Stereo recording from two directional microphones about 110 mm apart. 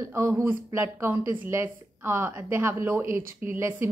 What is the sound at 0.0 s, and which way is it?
A woman's voice, 25° right (ahead or behind).